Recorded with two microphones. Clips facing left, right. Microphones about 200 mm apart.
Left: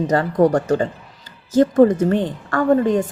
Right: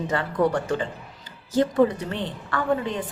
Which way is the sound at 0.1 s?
40° left (ahead or behind).